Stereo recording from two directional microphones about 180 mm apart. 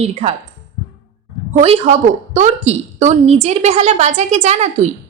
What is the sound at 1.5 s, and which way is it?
A woman's voice, 35° right (ahead or behind).